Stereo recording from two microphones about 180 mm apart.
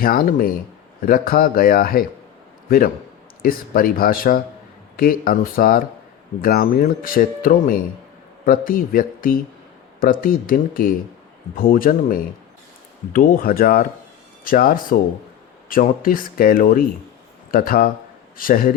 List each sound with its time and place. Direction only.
0.0 s a man's voice: 55° left (ahead or behind)